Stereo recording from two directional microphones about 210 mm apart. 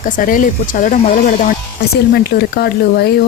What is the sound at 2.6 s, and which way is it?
Speech, 50° left (ahead or behind).